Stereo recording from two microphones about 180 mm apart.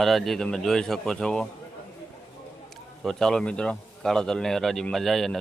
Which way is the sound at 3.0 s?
Centre (ahead or behind).